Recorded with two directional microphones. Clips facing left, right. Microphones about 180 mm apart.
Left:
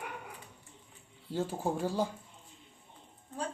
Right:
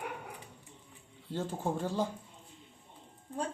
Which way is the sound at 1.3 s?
10° left (ahead or behind).